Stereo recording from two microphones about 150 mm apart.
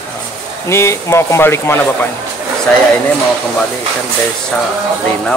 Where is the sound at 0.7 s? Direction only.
20° left (ahead or behind).